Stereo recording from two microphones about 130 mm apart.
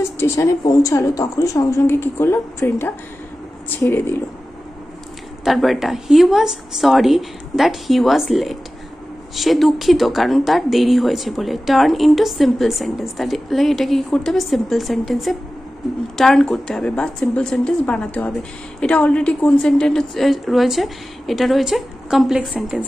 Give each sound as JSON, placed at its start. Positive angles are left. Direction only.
{"t": 0.2, "sound": "a woman's voice", "side_deg": 20}
{"t": 5.4, "sound": "speech", "side_deg": 0}